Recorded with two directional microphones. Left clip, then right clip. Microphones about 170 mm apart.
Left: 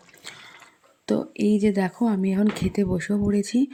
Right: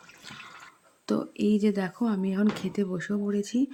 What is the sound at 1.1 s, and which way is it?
Speech, 25° left (ahead or behind).